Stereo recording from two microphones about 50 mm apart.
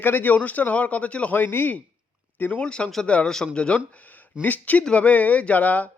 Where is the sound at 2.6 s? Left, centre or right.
Centre.